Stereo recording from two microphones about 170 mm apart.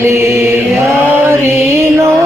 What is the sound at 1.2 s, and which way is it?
Music, 15° right (ahead or behind).